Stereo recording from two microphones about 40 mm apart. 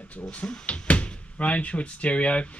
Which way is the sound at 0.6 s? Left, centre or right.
Left.